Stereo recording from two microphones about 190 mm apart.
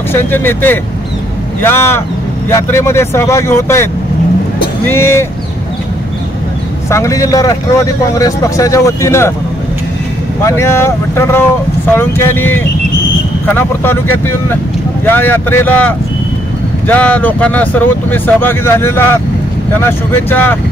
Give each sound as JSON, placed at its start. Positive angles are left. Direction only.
{"t": 0.1, "sound": "speech", "side_deg": 10}
{"t": 6.9, "sound": "speech", "side_deg": 15}
{"t": 10.4, "sound": "speech", "side_deg": 15}